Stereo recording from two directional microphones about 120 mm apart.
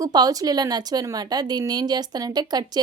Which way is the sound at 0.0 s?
30° right (ahead or behind).